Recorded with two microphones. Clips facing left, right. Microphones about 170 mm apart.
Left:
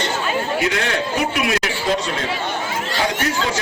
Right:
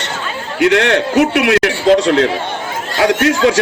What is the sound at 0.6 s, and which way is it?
Speech, 70° right (ahead or behind).